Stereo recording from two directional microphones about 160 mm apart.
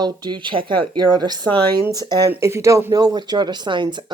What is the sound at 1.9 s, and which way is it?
Speech, 25° right (ahead or behind).